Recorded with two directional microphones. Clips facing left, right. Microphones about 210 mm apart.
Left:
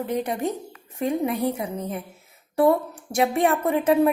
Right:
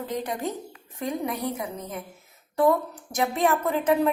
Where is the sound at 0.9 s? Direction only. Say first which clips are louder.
Left 5 dB; 25° left (ahead or behind).